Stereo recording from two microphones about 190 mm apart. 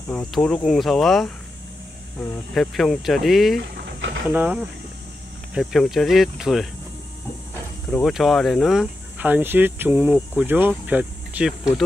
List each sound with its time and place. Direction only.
0.1 s speech: 5° left (ahead or behind)
2.5 s speech: centre (ahead or behind)
3.7 s a sound: 70° right (ahead or behind)
4.3 s speech: 5° right (ahead or behind)
7.9 s speech: centre (ahead or behind)